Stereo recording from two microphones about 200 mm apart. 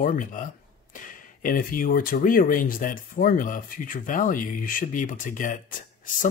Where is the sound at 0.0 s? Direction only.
40° left (ahead or behind).